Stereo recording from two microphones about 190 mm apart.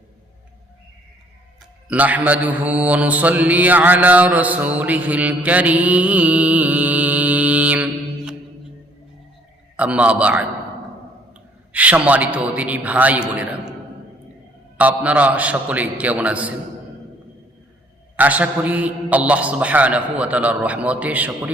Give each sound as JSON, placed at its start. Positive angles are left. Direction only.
{"t": 1.9, "sound": "mantra", "side_deg": -10}
{"t": 9.7, "sound": "mantra", "side_deg": -5}
{"t": 11.7, "sound": "mantra", "side_deg": -10}
{"t": 14.8, "sound": "mantra", "side_deg": -10}
{"t": 18.2, "sound": "mantra", "side_deg": -10}